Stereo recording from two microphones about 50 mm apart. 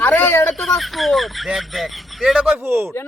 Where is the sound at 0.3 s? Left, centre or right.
Left.